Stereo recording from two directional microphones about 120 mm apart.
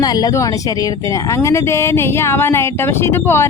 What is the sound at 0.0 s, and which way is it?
Speech, 35° left (ahead or behind).